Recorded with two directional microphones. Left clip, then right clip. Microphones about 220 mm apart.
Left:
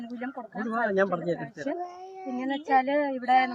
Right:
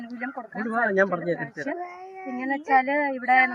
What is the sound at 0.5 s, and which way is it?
A man's voice, 35° right (ahead or behind).